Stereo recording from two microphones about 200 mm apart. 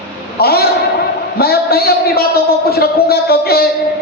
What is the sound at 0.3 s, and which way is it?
A man's voice, 50° left (ahead or behind).